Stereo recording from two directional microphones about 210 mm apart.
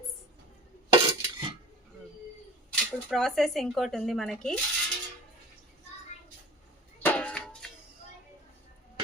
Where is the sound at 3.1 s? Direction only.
Centre (ahead or behind).